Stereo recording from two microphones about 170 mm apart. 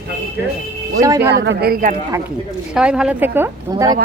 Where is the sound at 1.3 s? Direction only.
85° right; by 1.9 s 60° right (ahead or behind).